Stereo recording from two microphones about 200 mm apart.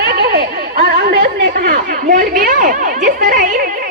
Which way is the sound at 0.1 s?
50° right (ahead or behind).